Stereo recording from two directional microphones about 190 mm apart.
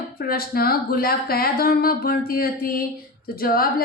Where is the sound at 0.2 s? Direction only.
50° left (ahead or behind).